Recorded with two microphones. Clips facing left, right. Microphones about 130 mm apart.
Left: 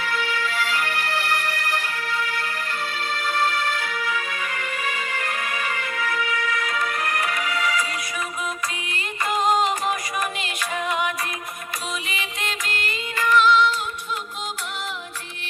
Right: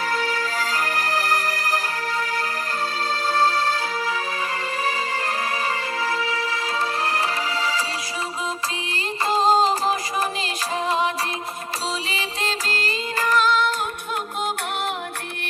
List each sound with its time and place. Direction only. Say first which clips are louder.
0.0 s music: right 2 dB; 40° right (ahead or behind)
9.3 s music: right 3 dB; 30° right (ahead or behind)